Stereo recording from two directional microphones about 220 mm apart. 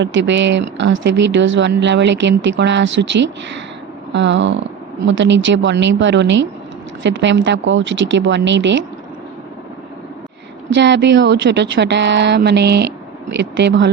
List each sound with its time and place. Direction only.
0.0 s speech: 55° right (ahead or behind)
10.8 s speech: 50° right (ahead or behind)